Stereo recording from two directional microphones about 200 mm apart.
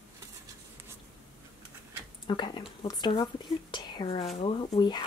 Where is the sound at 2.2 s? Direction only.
25° left (ahead or behind).